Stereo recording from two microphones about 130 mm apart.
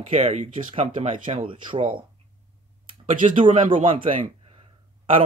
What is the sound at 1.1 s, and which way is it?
Speech, 40° right (ahead or behind).